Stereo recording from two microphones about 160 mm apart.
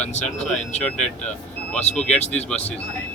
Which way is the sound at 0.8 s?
5° left (ahead or behind).